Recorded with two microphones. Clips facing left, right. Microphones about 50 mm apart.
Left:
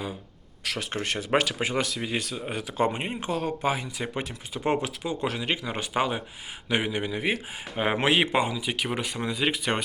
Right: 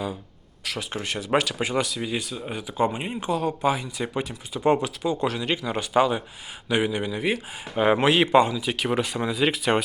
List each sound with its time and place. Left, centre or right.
0.6 s speech: left
1.4 s speech: left
2.8 s speech: left
4.6 s speech: left; by 9.8 s centre